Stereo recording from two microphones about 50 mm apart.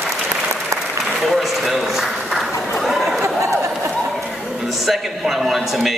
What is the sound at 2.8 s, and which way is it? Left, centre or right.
Chatter, centre.